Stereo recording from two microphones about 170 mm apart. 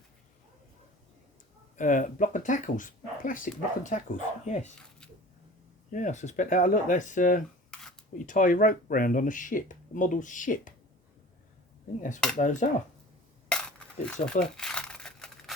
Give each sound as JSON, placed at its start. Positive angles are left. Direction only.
{"t": 1.7, "sound": "speech", "side_deg": 50}
{"t": 5.9, "sound": "speech", "side_deg": 45}
{"t": 7.7, "sound": "a sound", "side_deg": 5}
{"t": 8.3, "sound": "speech", "side_deg": 50}
{"t": 11.9, "sound": "speech", "side_deg": 50}
{"t": 13.5, "sound": "crumpling", "side_deg": 5}